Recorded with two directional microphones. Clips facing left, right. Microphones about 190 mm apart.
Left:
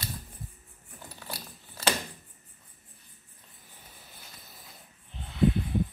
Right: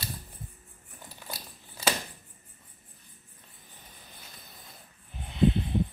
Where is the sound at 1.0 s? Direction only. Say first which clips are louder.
Left 1 dB; 15° right (ahead or behind).